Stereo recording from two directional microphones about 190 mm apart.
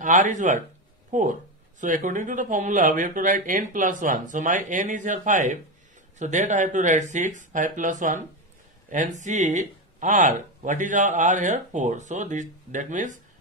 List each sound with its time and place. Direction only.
0.0 s speech: 40° right (ahead or behind)
9.2 s speech: 40° right (ahead or behind)